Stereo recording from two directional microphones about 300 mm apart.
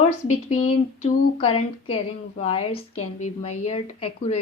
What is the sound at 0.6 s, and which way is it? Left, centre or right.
A woman's voice, left.